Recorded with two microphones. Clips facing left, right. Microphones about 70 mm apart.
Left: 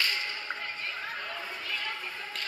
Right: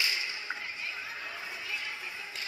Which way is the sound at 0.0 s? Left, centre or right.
Left.